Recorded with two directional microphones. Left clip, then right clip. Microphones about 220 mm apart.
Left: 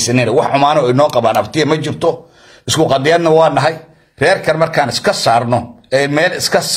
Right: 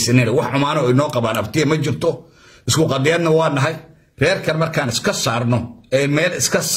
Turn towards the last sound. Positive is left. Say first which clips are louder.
# left 5 dB
turn(degrees=-20)  # may be behind; listen again after turning